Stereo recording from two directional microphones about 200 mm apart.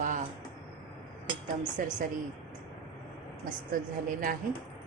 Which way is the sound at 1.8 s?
45° right (ahead or behind).